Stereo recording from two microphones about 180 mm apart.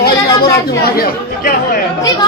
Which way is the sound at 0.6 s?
55° left (ahead or behind).